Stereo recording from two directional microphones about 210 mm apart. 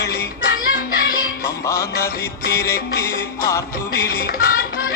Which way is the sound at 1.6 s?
15° left (ahead or behind).